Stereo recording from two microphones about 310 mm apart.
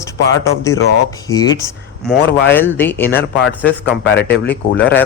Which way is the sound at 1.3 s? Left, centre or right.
Centre.